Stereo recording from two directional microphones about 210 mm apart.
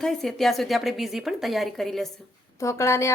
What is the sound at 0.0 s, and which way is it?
Speech, centre (ahead or behind).